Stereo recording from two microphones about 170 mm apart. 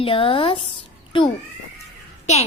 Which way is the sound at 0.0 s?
30° left (ahead or behind).